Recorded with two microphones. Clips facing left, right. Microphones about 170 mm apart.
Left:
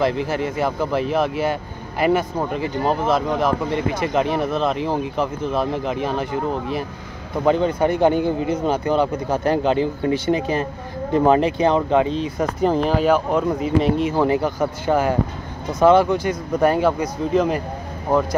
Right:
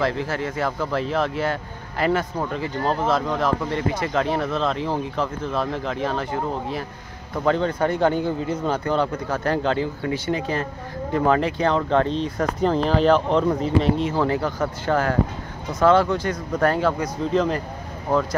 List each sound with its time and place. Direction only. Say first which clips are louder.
0.0 s speech: left 3 dB; 15° left (ahead or behind)